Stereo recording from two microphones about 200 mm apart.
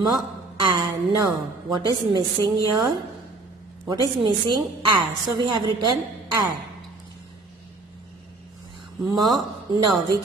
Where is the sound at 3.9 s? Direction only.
20° right (ahead or behind).